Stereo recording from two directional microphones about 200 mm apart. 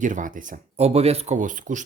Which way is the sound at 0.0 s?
40° right (ahead or behind).